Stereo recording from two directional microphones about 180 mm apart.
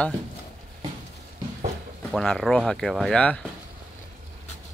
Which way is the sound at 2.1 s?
Centre (ahead or behind).